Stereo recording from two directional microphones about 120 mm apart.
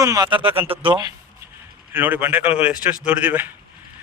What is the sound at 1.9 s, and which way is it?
Speech, 15° right (ahead or behind).